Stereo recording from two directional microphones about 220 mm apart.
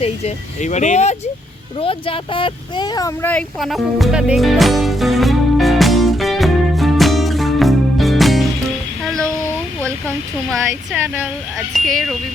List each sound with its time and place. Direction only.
0.0 s speech: 30° left (ahead or behind)
1.8 s a sound: 25° left (ahead or behind); by 8.4 s centre (ahead or behind)
10.5 s speech: 10° right (ahead or behind)